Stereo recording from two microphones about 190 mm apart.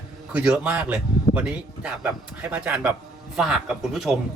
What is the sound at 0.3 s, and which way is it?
A man's voice, 5° right (ahead or behind).